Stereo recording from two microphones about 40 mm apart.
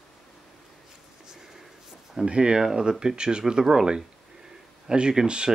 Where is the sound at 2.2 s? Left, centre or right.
Right.